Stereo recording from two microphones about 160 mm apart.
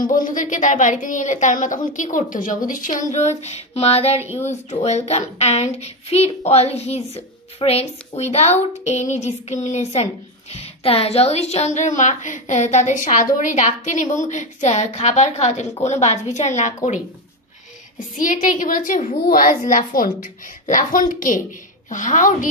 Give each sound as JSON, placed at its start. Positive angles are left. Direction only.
{"t": 0.0, "sound": "speech", "side_deg": 55}
{"t": 17.9, "sound": "a woman's voice", "side_deg": 55}